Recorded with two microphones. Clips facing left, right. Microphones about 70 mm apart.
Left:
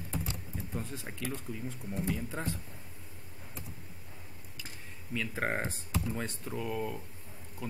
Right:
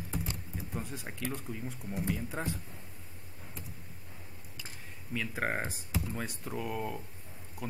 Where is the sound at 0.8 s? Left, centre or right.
Centre.